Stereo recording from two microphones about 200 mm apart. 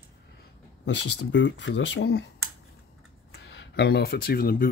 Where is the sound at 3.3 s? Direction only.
60° left (ahead or behind).